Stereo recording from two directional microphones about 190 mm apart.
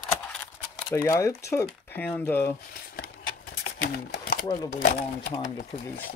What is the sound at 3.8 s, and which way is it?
Speech, 60° left (ahead or behind).